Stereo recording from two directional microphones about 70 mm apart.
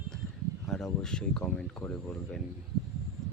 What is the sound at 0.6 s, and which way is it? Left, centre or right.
Speech, centre.